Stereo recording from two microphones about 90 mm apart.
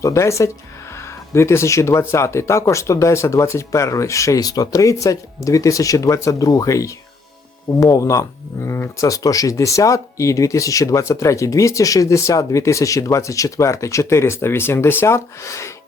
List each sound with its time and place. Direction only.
0.0 s speech: 30° left (ahead or behind)